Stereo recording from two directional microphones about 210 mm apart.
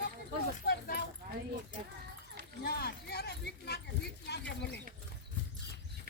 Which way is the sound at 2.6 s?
50° left (ahead or behind).